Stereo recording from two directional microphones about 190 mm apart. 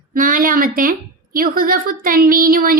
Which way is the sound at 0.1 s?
45° right (ahead or behind).